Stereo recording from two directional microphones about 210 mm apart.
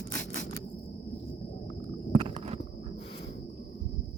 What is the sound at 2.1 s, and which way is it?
Walk, 30° right (ahead or behind).